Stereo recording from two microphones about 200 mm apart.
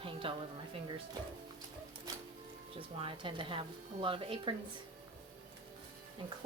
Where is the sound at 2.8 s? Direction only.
25° right (ahead or behind).